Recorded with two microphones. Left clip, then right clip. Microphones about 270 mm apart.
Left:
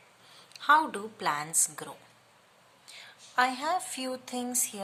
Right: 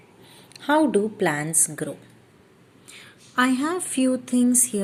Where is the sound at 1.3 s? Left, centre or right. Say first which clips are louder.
Right 5 dB; left.